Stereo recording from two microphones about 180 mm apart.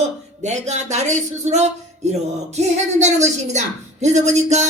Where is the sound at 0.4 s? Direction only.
40° right (ahead or behind).